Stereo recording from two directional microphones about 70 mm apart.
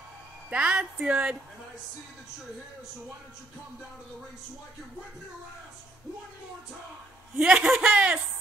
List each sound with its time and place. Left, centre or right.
0.5 s speech: centre
7.3 s speech: centre